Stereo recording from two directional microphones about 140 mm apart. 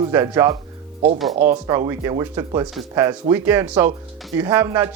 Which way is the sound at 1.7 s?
25° right (ahead or behind).